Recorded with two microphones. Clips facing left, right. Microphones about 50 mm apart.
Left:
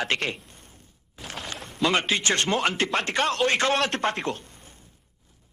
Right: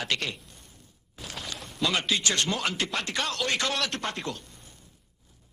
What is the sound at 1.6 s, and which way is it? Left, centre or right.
Speech, left.